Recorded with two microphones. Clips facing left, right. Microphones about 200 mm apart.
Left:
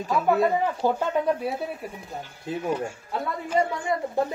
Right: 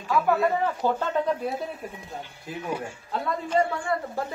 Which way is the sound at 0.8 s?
10° left (ahead or behind).